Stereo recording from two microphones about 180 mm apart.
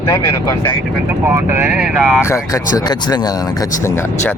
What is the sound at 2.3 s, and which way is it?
Speech, 20° left (ahead or behind).